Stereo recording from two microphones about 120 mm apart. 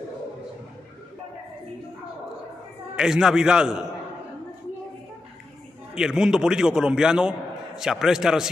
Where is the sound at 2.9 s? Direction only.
5° right (ahead or behind).